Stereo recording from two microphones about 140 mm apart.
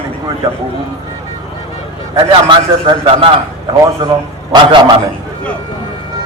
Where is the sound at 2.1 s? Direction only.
35° right (ahead or behind).